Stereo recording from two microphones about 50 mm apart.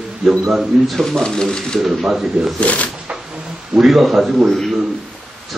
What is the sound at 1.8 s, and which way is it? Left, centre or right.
Speech, centre.